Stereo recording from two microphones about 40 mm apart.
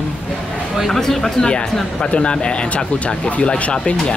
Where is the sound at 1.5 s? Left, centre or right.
Left.